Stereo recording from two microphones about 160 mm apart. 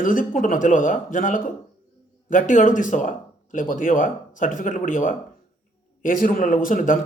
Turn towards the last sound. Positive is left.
turn(degrees=55)  # may be behind; listen again after turning